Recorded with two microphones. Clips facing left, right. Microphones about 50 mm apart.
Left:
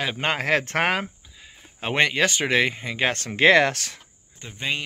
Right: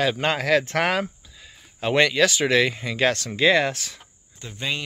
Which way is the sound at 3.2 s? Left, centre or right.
Left.